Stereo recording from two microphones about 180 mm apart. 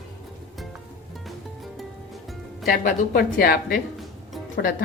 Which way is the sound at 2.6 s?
55° left (ahead or behind).